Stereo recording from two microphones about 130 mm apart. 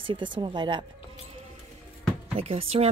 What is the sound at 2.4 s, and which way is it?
Speech, 50° right (ahead or behind).